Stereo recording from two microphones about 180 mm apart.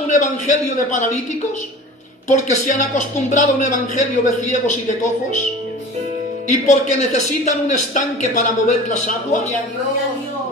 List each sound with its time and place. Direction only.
0.1 s a man's voice: 40° left (ahead or behind)
2.2 s a man's voice: 40° left (ahead or behind)
6.7 s speech: 40° left (ahead or behind)